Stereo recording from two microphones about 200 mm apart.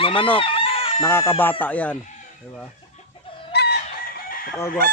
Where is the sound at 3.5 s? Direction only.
55° left (ahead or behind).